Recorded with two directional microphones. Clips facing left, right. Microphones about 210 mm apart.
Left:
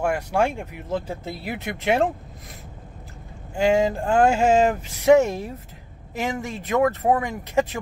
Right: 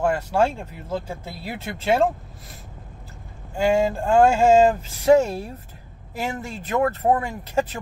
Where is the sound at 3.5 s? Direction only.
15° left (ahead or behind).